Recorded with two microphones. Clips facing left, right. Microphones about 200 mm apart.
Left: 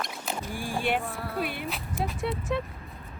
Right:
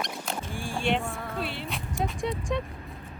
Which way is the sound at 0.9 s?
Centre (ahead or behind).